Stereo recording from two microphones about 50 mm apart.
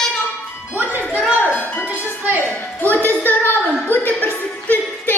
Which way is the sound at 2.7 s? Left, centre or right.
Left.